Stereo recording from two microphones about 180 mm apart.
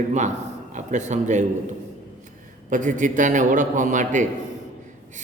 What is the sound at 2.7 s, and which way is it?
A man's voice, 45° right (ahead or behind).